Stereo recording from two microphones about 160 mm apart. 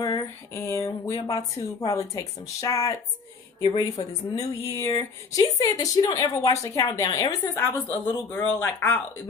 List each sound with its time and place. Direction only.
0.0 s a woman's voice: 20° left (ahead or behind)
3.6 s speech: 35° left (ahead or behind)
4.0 s a woman's voice: 20° left (ahead or behind)
7.6 s speech: 10° left (ahead or behind)